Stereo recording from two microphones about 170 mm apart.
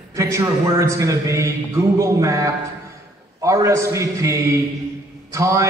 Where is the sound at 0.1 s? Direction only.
20° right (ahead or behind).